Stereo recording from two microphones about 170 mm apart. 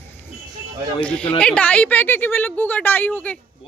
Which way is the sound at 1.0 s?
5° left (ahead or behind).